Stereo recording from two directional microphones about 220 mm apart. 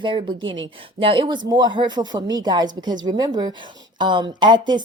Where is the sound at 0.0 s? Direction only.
20° right (ahead or behind).